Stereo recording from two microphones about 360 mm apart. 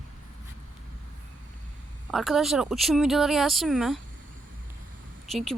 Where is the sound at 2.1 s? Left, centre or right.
Centre.